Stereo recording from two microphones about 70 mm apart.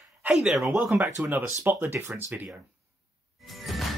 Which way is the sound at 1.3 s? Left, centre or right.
Right.